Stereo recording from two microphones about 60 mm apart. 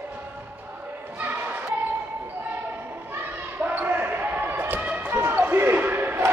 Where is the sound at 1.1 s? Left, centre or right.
Right.